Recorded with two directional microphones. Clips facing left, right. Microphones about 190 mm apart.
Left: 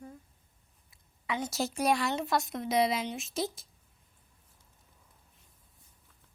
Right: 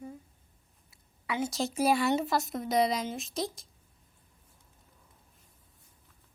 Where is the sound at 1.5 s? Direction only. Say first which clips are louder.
Right 1 dB; 5° left (ahead or behind).